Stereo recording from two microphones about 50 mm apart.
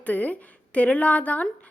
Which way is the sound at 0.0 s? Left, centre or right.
Left.